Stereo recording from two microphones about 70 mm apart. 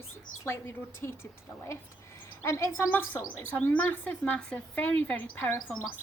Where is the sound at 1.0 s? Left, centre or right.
Left.